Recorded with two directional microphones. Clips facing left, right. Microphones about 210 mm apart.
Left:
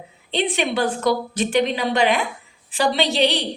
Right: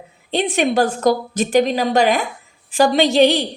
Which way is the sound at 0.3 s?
45° right (ahead or behind).